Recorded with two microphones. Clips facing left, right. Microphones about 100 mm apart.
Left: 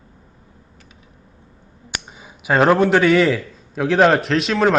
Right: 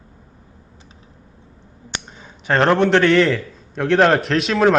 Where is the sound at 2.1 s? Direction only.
10° left (ahead or behind).